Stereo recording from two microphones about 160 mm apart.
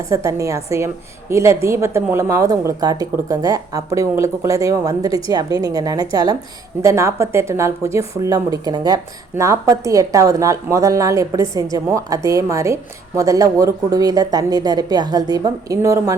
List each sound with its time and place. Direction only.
0.1 s a woman's voice: 20° right (ahead or behind)